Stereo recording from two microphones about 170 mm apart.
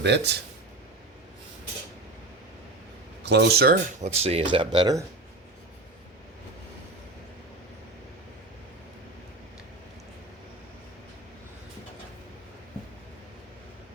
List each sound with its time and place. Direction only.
0.0 s speech: 80° right
3.2 s speech: 75° right (ahead or behind)
4.0 s speech: 40° right (ahead or behind)